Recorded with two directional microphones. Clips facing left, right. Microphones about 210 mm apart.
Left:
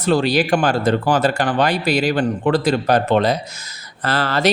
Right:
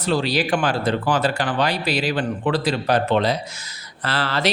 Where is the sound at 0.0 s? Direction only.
50° left (ahead or behind).